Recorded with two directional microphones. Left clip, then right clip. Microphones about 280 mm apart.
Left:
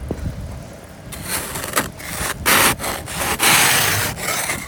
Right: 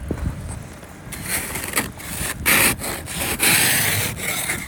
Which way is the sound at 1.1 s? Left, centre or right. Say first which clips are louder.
Left 1 dB; centre.